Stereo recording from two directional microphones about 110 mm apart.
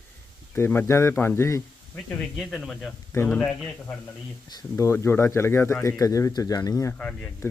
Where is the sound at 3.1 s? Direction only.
20° left (ahead or behind).